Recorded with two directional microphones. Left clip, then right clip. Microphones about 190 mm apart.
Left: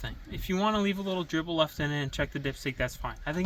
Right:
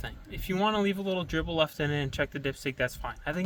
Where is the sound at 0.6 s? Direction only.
25° right (ahead or behind).